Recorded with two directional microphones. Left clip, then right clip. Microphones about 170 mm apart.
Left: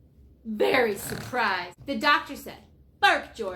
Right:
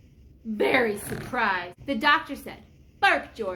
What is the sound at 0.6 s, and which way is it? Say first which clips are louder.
A woman's voice: even; 15° right (ahead or behind).